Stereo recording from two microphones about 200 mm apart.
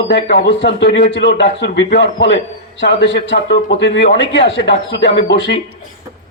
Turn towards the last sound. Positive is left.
turn(degrees=60)  # may be behind; listen again after turning